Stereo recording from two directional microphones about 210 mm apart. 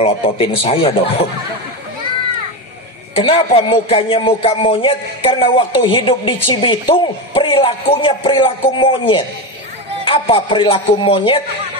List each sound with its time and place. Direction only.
0.0 s a man's voice: 25° left (ahead or behind)
3.2 s a man's voice: 25° left (ahead or behind)